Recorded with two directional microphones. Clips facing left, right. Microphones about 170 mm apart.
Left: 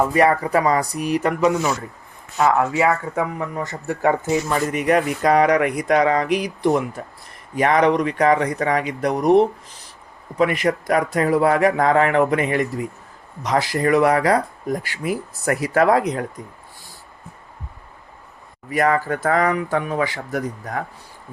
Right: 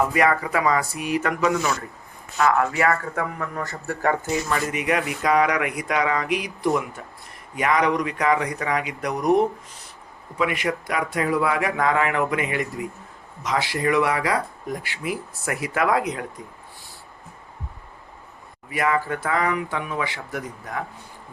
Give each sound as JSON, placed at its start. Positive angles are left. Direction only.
{"t": 0.0, "sound": "speech", "side_deg": 35}
{"t": 2.4, "sound": "speech", "side_deg": 20}
{"t": 4.7, "sound": "speech", "side_deg": 40}
{"t": 18.7, "sound": "speech", "side_deg": 40}